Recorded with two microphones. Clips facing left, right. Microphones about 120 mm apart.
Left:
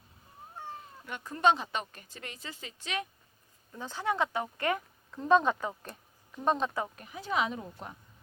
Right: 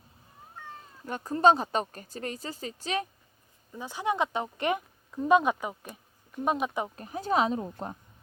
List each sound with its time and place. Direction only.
1.0 s speech: 40° right (ahead or behind)
3.7 s speech: 10° right (ahead or behind)
6.9 s speech: 40° right (ahead or behind)